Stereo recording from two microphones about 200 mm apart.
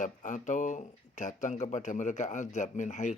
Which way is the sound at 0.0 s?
40° left (ahead or behind).